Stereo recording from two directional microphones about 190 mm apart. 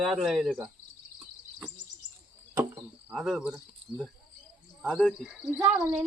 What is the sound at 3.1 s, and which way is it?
Speech, centre (ahead or behind).